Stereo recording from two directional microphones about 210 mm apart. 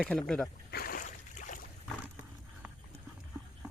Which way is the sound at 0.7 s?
45° left (ahead or behind).